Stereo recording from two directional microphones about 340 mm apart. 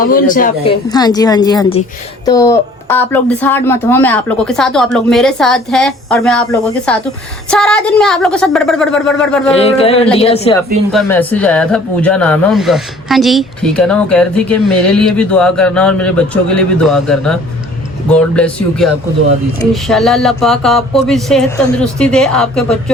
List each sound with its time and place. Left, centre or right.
0.0 s speech: left
0.9 s speech: centre
9.6 s speech: centre
10.9 s speech: centre